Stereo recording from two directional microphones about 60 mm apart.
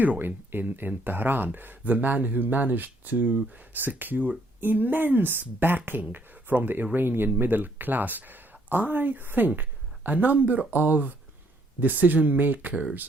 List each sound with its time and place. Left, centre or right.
0.0 s a woman's voice: right